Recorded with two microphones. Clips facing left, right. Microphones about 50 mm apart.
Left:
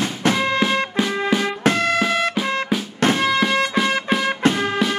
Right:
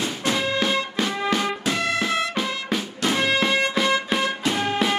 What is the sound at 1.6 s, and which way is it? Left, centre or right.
Music, left.